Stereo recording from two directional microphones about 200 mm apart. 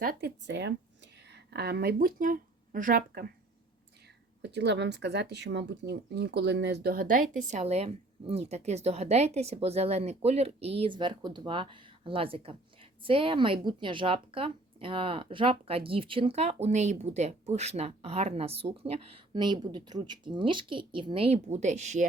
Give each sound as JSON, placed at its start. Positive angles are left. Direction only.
{"t": 0.0, "sound": "speech", "side_deg": -50}
{"t": 4.4, "sound": "speech", "side_deg": -60}